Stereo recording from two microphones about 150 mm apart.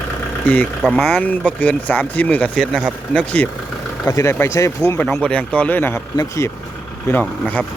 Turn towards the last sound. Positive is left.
turn(degrees=10)  # may be behind; listen again after turning